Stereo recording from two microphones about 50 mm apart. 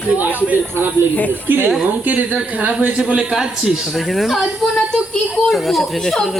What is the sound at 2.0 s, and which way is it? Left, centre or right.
Speech, right.